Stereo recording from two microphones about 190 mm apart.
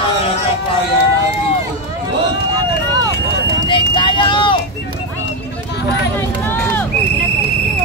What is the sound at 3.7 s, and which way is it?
Vehicle, 25° left (ahead or behind).